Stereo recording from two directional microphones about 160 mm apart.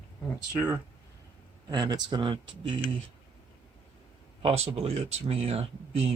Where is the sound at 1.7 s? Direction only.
25° right (ahead or behind).